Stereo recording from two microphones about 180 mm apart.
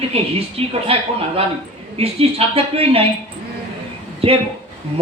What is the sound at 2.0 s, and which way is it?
A man's voice, 30° right (ahead or behind).